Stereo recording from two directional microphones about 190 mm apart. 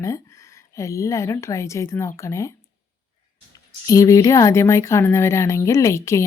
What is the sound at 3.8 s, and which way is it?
Speech, 15° left (ahead or behind).